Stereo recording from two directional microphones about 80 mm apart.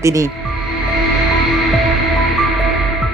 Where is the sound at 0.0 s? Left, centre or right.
Right.